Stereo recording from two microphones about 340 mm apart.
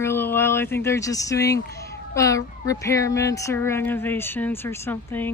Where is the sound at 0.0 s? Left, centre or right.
Centre.